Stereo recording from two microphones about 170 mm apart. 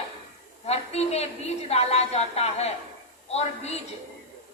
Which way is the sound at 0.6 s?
40° left (ahead or behind).